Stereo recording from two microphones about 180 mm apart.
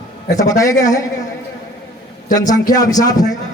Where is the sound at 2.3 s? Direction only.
20° left (ahead or behind).